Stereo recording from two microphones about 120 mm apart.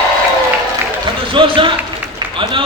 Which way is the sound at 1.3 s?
45° right (ahead or behind).